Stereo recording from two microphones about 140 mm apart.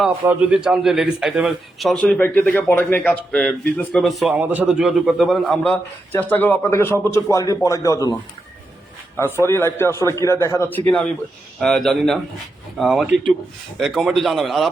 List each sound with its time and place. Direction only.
0.3 s a man's voice: 10° right (ahead or behind); by 8.1 s 25° left (ahead or behind)
9.1 s a man's voice: 15° left (ahead or behind); by 14.7 s centre (ahead or behind)